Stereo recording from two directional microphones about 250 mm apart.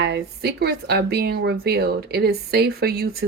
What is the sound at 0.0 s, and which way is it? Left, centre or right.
Speech, right.